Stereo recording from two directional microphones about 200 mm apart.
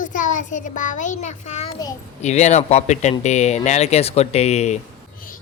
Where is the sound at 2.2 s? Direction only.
35° left (ahead or behind).